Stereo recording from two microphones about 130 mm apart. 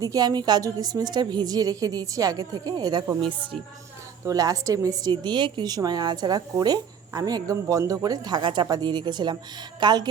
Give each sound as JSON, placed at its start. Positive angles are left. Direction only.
{"t": 0.0, "sound": "a woman's voice", "side_deg": -30}
{"t": 4.3, "sound": "a woman's voice", "side_deg": -25}